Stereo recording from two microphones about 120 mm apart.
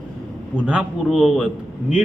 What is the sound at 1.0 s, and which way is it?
Speech, centre (ahead or behind).